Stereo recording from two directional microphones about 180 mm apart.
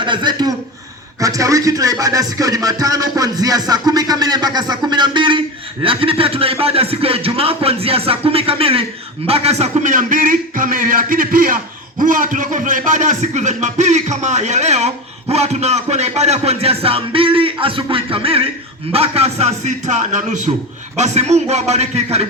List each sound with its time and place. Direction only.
0.0 s a man's voice: 25° right (ahead or behind)